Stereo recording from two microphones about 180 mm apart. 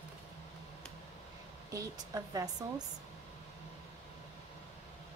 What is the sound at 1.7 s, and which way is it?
Speech, 20° right (ahead or behind).